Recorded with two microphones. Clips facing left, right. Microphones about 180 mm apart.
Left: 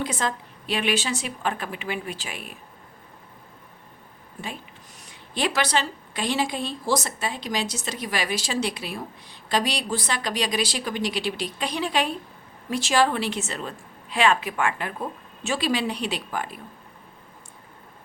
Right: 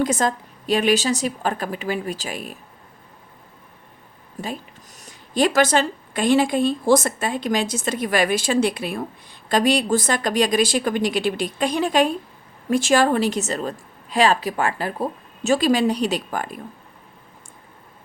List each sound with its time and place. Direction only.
0.0 s a woman's voice: 45° right (ahead or behind)
4.9 s a woman's voice: 45° right (ahead or behind)